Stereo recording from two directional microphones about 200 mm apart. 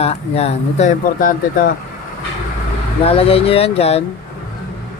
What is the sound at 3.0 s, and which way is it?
Speech, 30° left (ahead or behind).